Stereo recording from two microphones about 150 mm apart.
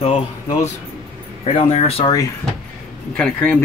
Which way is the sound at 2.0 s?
25° left (ahead or behind).